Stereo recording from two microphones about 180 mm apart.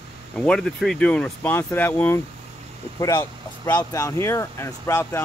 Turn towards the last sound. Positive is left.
turn(degrees=15)  # may be behind; listen again after turning